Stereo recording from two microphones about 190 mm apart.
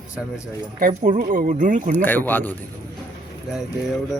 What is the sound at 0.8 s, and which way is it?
Speech, 35° right (ahead or behind).